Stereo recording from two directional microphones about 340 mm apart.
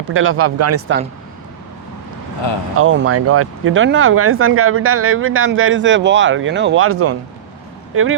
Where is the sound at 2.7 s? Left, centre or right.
Right.